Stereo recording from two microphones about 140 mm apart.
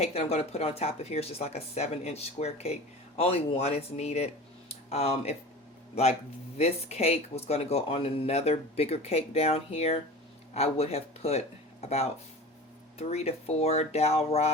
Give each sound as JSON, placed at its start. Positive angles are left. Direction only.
{"t": 0.0, "sound": "speech", "side_deg": 50}
{"t": 4.7, "sound": "a sound", "side_deg": 50}
{"t": 5.9, "sound": "a man's voice", "side_deg": 50}